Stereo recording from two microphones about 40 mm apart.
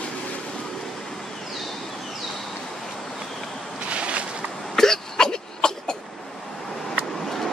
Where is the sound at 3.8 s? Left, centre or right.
Right.